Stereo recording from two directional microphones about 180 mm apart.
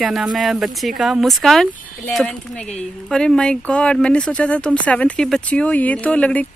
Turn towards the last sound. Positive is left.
turn(degrees=10)  # may be behind; listen again after turning